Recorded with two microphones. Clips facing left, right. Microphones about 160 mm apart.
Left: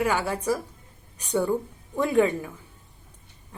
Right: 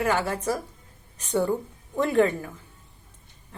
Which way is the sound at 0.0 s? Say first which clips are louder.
Even; 10° left (ahead or behind).